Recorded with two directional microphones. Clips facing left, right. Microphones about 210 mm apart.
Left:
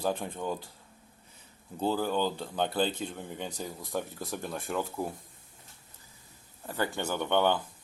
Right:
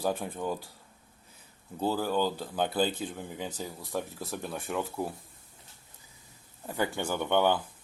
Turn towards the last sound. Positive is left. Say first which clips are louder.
# right 1 dB
turn(degrees=-10)  # may be behind; listen again after turning